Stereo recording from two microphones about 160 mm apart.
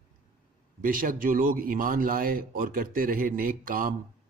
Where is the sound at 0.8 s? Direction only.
60° right (ahead or behind).